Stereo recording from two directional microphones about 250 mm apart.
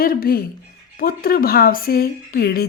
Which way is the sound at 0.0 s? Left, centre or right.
Left.